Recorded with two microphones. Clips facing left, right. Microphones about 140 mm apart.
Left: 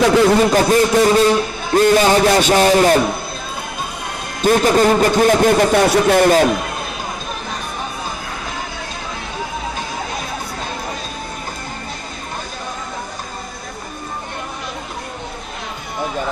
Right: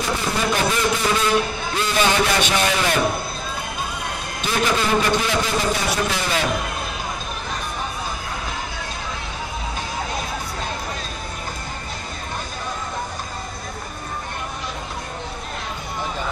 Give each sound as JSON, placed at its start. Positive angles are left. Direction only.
{"t": 0.0, "sound": "speech", "side_deg": 90}
{"t": 0.5, "sound": "a man's voice", "side_deg": 45}
{"t": 4.5, "sound": "a man's voice", "side_deg": 45}